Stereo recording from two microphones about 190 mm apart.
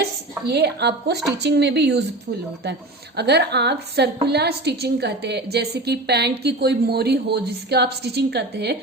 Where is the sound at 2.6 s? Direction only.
60° right (ahead or behind).